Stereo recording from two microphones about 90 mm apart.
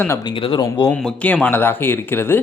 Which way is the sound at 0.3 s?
70° left (ahead or behind).